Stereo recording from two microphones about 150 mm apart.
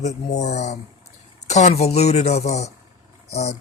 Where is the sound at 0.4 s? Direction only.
50° left (ahead or behind).